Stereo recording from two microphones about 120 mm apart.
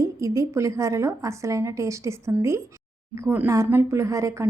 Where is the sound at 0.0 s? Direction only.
25° right (ahead or behind).